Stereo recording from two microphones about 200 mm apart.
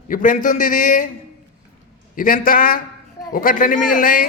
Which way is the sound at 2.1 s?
45° left (ahead or behind).